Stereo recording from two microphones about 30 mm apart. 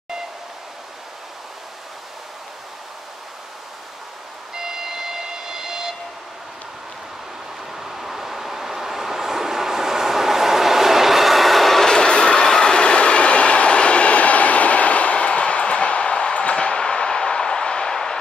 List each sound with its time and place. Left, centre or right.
4.6 s vehicle: centre
7.7 s vehicle: centre
11.9 s train: left
12.4 s train: left
12.7 s train: left
16.5 s a sound: left